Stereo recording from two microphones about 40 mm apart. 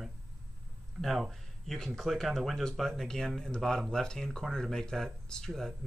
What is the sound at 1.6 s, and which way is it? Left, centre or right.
Speech, centre.